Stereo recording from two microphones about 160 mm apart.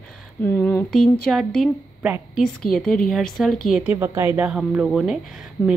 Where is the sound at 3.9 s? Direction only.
15° right (ahead or behind).